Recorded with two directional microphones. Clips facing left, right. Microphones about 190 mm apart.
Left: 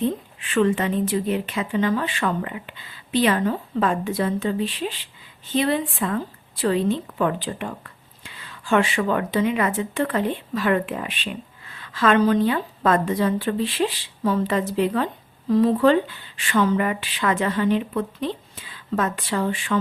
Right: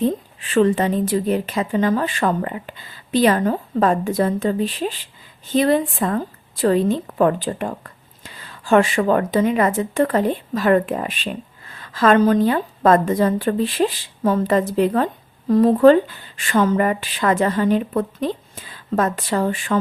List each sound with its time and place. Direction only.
0.0 s a woman's voice: 35° right (ahead or behind)